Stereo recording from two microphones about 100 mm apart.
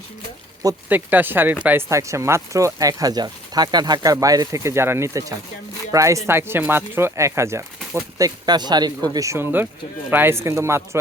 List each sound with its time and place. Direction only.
0.9 s speech: 20° right (ahead or behind)
1.9 s speech: 30° right (ahead or behind)
8.2 s speech: 45° right (ahead or behind); by 10.8 s 25° right (ahead or behind)